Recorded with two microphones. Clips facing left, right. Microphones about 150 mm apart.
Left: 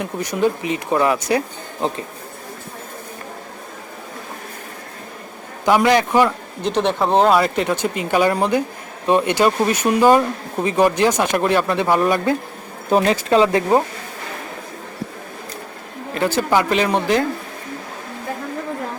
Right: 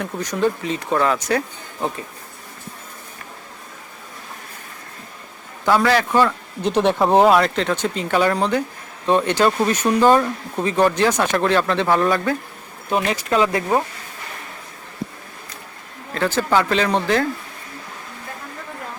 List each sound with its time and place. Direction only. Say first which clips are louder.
0.0 s speech: left 1 dB; 10° left (ahead or behind)
5.6 s speech: left 2 dB; 15° left (ahead or behind)
6.6 s speech: right 2 dB; 5° right (ahead or behind); by 12.4 s 15° left (ahead or behind)
12.9 s speech: left 5 dB; 35° left (ahead or behind)
16.1 s speech: left 1 dB; 15° left (ahead or behind)